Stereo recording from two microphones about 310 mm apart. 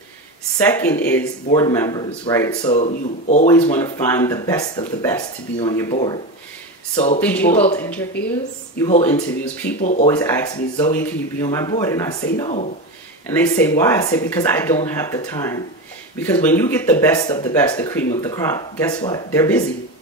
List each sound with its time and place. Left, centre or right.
0.7 s speech: centre
2.7 s speech: left
3.7 s speech: centre
7.2 s speech: centre
9.8 s speech: left
10.0 s speech: centre
12.4 s speech: centre
13.3 s speech: centre